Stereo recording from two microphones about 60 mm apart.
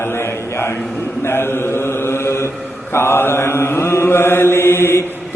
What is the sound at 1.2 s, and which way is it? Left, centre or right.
Mantra, left.